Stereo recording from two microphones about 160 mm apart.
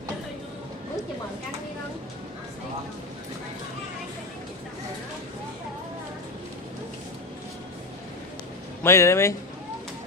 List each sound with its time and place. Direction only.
8.8 s speech: 15° left (ahead or behind)